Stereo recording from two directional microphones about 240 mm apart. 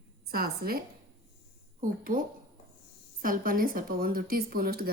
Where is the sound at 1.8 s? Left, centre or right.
Right.